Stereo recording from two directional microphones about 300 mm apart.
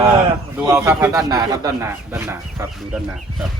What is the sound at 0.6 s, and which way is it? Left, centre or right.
A man's voice, centre.